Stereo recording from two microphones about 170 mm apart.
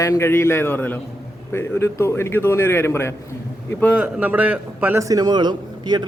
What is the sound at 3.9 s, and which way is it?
A man's voice, 5° right (ahead or behind).